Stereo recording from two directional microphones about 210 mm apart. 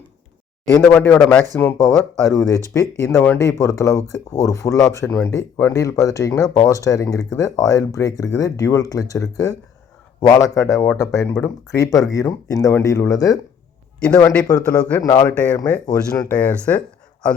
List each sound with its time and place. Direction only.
0.8 s speech: 5° left (ahead or behind)
14.5 s speech: 10° left (ahead or behind)